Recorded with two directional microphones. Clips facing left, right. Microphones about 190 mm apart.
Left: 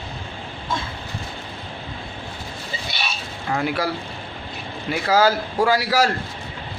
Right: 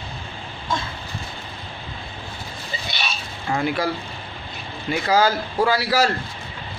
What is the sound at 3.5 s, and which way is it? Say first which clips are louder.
Speech: right 1 dB; 5° left (ahead or behind).